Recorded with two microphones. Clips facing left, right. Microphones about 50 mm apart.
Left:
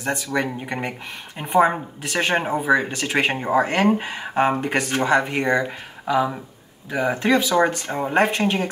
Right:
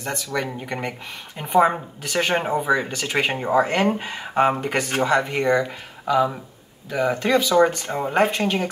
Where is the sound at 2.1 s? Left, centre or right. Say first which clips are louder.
Even; centre.